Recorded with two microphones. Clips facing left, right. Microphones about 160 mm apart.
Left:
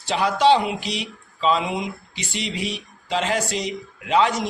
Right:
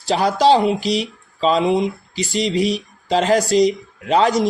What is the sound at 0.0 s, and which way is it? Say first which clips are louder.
Speech: right 3 dB; 35° right (ahead or behind).